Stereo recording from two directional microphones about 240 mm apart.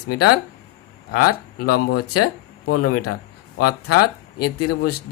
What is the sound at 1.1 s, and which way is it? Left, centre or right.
Speech, left.